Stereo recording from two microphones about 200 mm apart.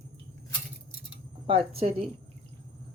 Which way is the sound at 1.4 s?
30° right (ahead or behind).